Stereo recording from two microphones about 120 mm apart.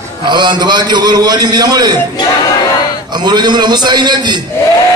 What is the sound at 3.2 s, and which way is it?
A man's voice, 35° right (ahead or behind).